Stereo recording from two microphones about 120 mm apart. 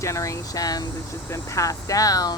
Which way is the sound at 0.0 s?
25° left (ahead or behind).